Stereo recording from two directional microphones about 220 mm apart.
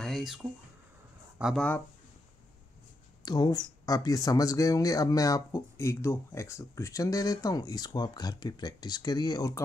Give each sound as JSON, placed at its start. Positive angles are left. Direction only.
{"t": 0.0, "sound": "a sound", "side_deg": 0}
{"t": 1.4, "sound": "speech", "side_deg": 5}
{"t": 3.3, "sound": "speech", "side_deg": 20}